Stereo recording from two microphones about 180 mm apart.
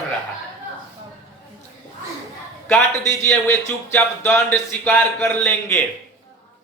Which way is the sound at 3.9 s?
10° left (ahead or behind).